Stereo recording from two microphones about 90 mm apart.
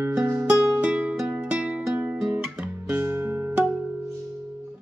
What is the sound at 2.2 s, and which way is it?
Music, 5° right (ahead or behind).